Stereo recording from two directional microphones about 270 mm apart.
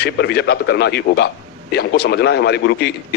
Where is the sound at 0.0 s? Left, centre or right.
Left.